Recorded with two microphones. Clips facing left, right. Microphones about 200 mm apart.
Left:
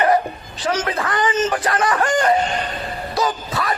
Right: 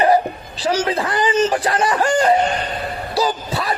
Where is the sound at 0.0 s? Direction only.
30° right (ahead or behind).